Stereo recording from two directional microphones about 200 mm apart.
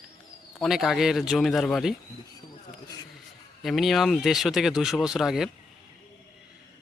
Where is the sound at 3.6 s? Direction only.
Centre (ahead or behind).